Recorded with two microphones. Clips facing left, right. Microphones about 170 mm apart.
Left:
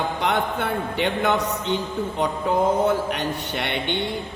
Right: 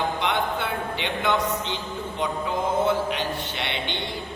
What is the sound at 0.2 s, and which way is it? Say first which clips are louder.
A man's voice: left 2 dB; 50° left (ahead or behind).